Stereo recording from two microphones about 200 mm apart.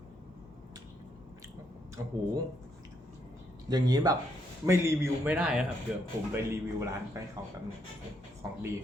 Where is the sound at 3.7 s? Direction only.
20° right (ahead or behind).